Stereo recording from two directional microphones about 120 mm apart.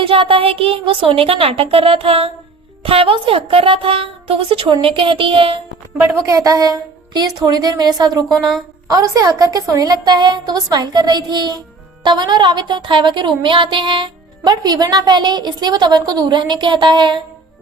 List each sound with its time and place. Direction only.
0.0 s speech: 50° right (ahead or behind)
6.0 s a woman's voice: 25° right (ahead or behind)